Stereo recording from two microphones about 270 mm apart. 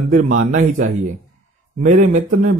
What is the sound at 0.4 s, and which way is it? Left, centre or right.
Speech, right.